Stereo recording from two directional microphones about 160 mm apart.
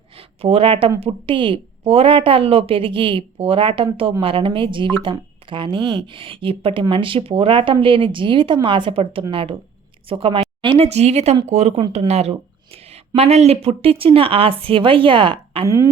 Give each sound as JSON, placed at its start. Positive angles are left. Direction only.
{"t": 0.2, "sound": "speech", "side_deg": -35}
{"t": 15.6, "sound": "speech", "side_deg": -15}